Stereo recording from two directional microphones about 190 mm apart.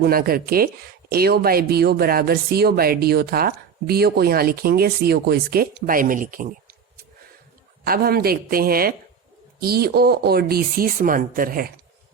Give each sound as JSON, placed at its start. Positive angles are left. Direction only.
{"t": 0.0, "sound": "speech", "side_deg": -50}
{"t": 7.9, "sound": "speech", "side_deg": -55}